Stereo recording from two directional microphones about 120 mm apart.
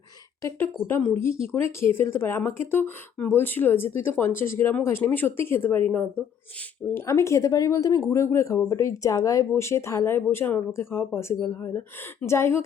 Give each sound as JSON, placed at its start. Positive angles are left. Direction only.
{"t": 0.4, "sound": "speech", "side_deg": 15}